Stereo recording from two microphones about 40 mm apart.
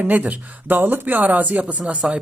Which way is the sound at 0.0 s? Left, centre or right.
Right.